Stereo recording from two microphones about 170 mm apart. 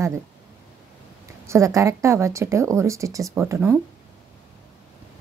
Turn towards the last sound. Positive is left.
turn(degrees=-15)  # may be behind; listen again after turning